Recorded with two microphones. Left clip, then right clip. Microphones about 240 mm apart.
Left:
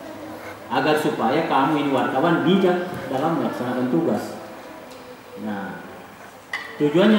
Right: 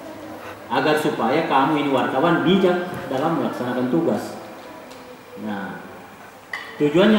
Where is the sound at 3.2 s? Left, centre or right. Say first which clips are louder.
Right 1 dB; left.